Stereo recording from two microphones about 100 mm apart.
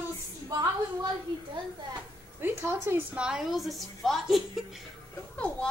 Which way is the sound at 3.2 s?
5° right (ahead or behind).